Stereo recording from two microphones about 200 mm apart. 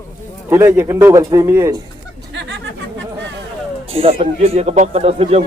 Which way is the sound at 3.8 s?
30° right (ahead or behind).